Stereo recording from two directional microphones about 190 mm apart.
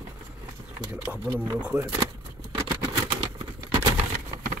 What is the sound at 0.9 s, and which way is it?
Speech, 5° right (ahead or behind).